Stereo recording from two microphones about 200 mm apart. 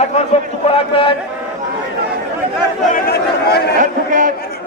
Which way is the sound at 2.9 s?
50° left (ahead or behind).